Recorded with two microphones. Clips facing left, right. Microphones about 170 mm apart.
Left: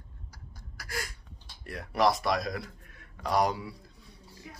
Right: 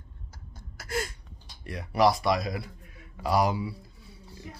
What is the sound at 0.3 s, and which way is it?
Gasp, 25° right (ahead or behind).